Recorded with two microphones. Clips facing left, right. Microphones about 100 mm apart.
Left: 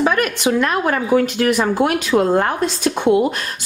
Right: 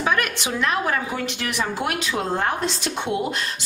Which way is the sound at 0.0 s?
50° left (ahead or behind).